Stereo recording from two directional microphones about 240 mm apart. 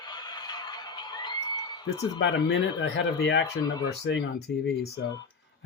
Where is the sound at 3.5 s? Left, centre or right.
Centre.